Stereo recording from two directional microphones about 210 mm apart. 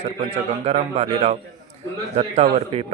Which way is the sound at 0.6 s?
30° right (ahead or behind).